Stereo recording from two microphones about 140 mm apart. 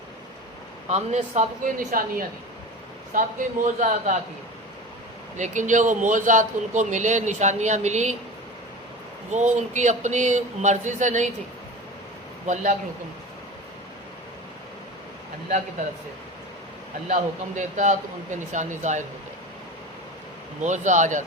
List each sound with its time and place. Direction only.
0.9 s a man's voice: 55° right (ahead or behind)
1.9 s a woman's voice: 85° right
3.1 s a man's voice: 70° right (ahead or behind)
5.4 s a man's voice: 60° right (ahead or behind)
9.3 s a man's voice: 55° right (ahead or behind)
17.1 s a man's voice: 65° right (ahead or behind)
20.6 s a man's voice: 60° right (ahead or behind)